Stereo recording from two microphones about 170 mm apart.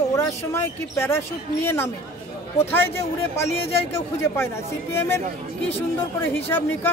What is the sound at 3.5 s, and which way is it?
Speech, 35° left (ahead or behind).